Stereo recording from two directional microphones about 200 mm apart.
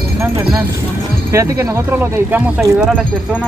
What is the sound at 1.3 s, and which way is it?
Speech, 15° right (ahead or behind).